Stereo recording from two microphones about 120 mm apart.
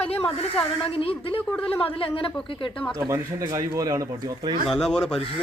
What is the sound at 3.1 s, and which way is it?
Speech, 30° right (ahead or behind).